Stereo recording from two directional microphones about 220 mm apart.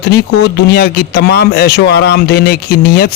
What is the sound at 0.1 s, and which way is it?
Speech, 50° left (ahead or behind).